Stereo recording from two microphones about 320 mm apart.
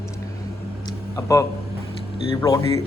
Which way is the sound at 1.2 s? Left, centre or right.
Centre.